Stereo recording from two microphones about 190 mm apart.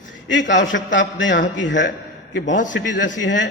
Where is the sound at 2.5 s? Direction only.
45° left (ahead or behind).